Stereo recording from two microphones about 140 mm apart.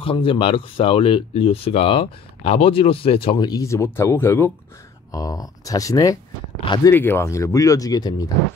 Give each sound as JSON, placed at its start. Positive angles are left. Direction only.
{"t": 0.0, "sound": "speech", "side_deg": 40}
{"t": 3.4, "sound": "speech", "side_deg": 25}
{"t": 6.9, "sound": "speech", "side_deg": 15}